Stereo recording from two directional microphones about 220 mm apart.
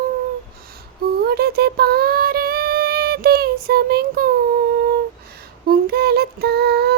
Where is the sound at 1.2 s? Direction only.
45° right (ahead or behind).